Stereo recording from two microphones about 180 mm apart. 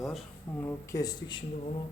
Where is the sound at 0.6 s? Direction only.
15° left (ahead or behind).